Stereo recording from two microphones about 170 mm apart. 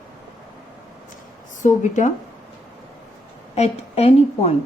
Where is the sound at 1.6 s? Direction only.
45° left (ahead or behind).